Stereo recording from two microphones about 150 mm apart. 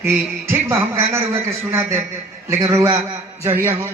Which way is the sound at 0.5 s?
15° right (ahead or behind).